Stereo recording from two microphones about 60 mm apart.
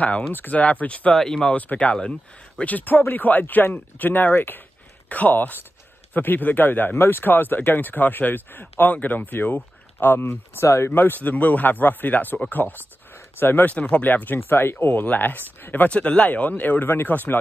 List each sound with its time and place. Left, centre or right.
0.3 s speech: left
1.1 s speech: centre
1.6 s speech: left
2.6 s speech: left
10.9 s speech: left
15.9 s speech: centre